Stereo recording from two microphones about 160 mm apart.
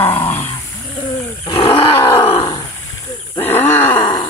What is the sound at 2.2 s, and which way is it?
Groan, 40° left (ahead or behind).